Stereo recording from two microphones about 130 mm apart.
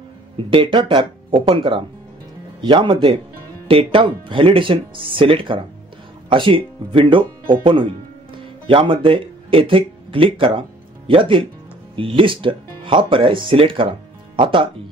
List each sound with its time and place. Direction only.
0.5 s speech: 40° right (ahead or behind)